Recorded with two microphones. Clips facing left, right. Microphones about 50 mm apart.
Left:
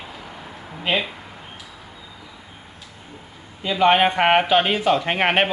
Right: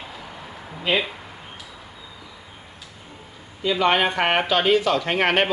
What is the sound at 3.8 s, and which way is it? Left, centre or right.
A man's voice, centre.